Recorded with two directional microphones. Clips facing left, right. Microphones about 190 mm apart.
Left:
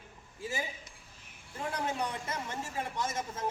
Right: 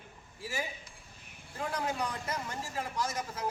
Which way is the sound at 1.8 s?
25° left (ahead or behind).